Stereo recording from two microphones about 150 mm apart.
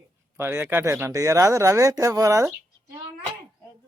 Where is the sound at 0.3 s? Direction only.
15° right (ahead or behind).